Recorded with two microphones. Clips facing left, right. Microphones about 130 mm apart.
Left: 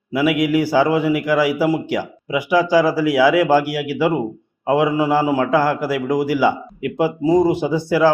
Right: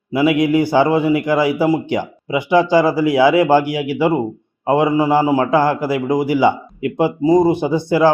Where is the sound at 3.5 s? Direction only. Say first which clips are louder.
Right 2 dB; 15° right (ahead or behind).